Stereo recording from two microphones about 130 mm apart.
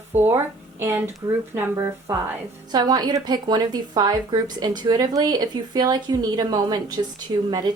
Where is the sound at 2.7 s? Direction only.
30° right (ahead or behind).